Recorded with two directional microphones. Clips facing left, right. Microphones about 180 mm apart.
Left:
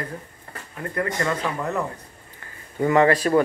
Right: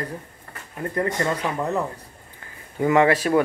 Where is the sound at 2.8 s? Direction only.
10° right (ahead or behind).